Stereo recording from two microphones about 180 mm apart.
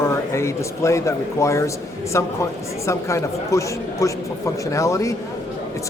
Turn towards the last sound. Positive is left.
turn(degrees=15)  # may be behind; listen again after turning